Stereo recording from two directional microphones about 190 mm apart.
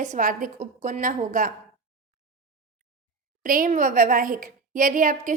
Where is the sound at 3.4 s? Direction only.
45° right (ahead or behind).